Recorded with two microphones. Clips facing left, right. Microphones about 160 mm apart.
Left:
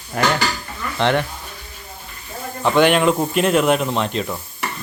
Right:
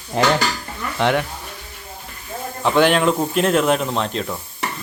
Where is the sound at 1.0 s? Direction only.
5° right (ahead or behind).